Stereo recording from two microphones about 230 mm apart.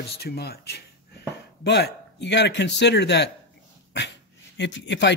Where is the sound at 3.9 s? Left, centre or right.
Left.